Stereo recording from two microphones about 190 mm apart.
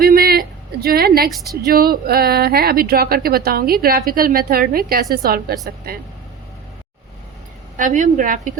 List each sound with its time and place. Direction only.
0.0 s a sound: 50° right (ahead or behind)
1.3 s a woman's voice: centre (ahead or behind)
1.6 s a woman's voice: 50° right (ahead or behind)
7.8 s a woman's voice: 40° right (ahead or behind)